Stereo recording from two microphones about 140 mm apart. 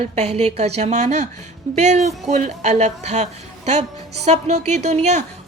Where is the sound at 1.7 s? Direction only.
55° right (ahead or behind).